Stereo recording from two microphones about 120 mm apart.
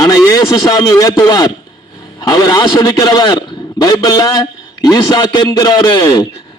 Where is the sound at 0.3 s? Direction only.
30° left (ahead or behind).